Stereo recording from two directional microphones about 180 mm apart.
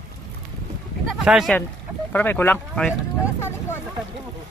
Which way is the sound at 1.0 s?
Centre (ahead or behind).